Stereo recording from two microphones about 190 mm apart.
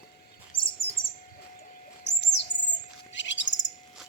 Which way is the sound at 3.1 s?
70° left (ahead or behind).